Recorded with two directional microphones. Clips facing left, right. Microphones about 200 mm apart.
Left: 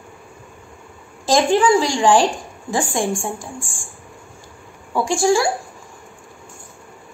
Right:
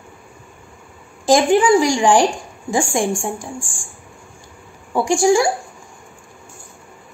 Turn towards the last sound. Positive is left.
turn(degrees=-15)  # may be behind; listen again after turning